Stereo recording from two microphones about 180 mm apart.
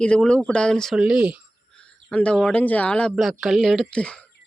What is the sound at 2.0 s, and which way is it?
Speech, 5° left (ahead or behind).